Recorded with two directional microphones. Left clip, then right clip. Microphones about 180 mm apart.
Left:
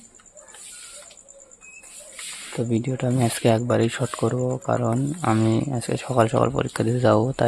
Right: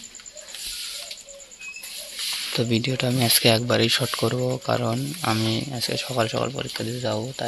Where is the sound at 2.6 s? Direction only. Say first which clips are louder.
Left 1 dB; 10° left (ahead or behind).